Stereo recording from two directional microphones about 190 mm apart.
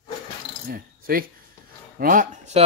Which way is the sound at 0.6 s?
50° right (ahead or behind).